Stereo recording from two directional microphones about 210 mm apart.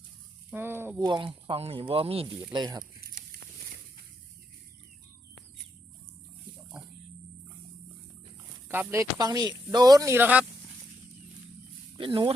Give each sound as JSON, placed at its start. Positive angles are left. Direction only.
{"t": 0.5, "sound": "speech", "side_deg": -10}
{"t": 8.6, "sound": "speech", "side_deg": -10}
{"t": 11.9, "sound": "speech", "side_deg": -25}